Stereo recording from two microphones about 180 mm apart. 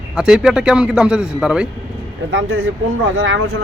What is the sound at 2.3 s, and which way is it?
Speech, 90° right.